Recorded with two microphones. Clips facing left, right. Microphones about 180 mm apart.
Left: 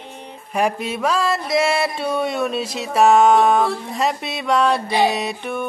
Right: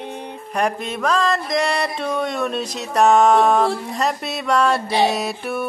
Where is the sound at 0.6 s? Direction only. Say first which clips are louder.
Left 1 dB; 5° left (ahead or behind).